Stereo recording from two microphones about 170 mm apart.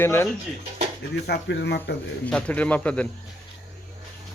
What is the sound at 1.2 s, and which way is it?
Speech, 85° left.